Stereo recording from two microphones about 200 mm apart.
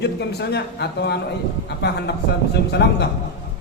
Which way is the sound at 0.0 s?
55° left (ahead or behind).